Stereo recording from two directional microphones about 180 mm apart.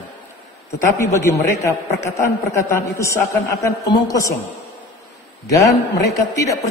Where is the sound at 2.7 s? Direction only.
15° left (ahead or behind).